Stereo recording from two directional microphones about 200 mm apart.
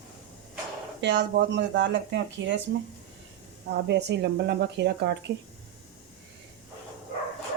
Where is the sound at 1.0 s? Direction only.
60° right (ahead or behind).